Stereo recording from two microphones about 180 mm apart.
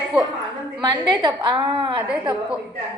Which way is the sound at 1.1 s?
25° right (ahead or behind).